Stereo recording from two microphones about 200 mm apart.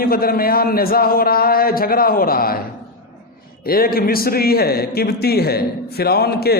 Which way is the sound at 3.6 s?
50° left (ahead or behind).